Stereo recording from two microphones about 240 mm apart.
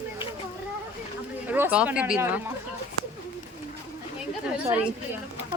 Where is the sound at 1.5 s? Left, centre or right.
Centre.